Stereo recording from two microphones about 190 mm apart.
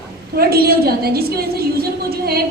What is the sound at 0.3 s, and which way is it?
A woman's voice, 55° right (ahead or behind).